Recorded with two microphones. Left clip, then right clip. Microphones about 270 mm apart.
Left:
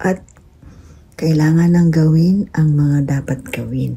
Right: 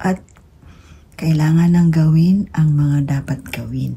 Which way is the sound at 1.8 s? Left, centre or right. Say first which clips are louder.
Left 2 dB; centre.